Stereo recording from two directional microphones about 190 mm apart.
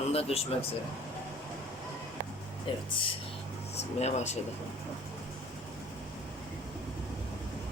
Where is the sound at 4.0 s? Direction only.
35° left (ahead or behind).